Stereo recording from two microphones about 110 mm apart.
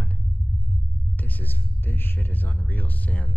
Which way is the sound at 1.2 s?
15° left (ahead or behind).